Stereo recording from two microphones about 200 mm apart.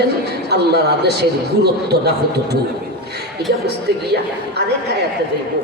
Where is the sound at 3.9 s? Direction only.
55° right (ahead or behind).